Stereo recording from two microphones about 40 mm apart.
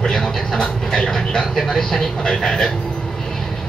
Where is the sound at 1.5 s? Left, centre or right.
Centre.